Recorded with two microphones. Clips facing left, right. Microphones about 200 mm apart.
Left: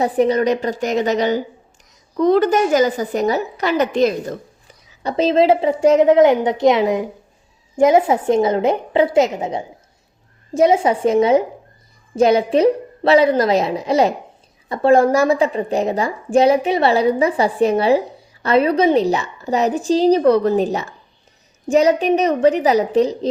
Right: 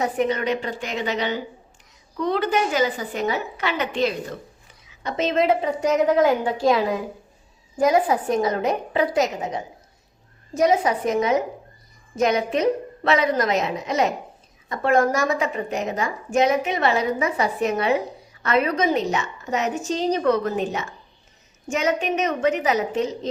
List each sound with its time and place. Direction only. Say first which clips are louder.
0.0 s a woman's voice: left 7 dB; 35° left (ahead or behind)